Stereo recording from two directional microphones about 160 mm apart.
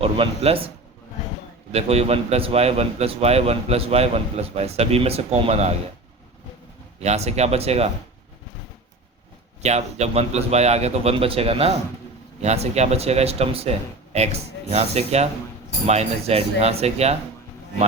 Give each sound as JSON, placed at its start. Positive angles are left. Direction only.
{"t": 0.0, "sound": "a man's voice", "side_deg": -35}
{"t": 1.7, "sound": "a man's voice", "side_deg": -40}
{"t": 7.0, "sound": "a man's voice", "side_deg": -40}
{"t": 9.6, "sound": "a man's voice", "side_deg": -45}